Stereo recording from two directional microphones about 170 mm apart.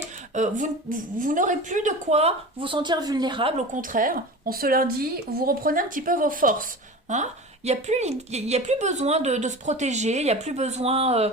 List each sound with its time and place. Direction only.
0.3 s a woman's voice: 45° right (ahead or behind); by 3.5 s 30° right (ahead or behind)
3.7 s a woman's voice: 55° right (ahead or behind); by 11.3 s 35° right (ahead or behind)